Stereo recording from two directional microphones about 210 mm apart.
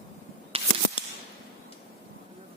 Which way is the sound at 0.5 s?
25° right (ahead or behind).